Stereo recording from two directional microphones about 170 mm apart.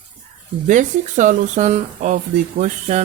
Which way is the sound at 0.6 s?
45° right (ahead or behind).